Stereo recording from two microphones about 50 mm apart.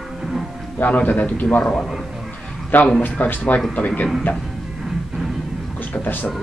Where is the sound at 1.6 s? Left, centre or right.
Centre.